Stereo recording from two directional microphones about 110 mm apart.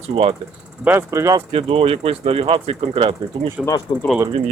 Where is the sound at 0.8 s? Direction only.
25° right (ahead or behind).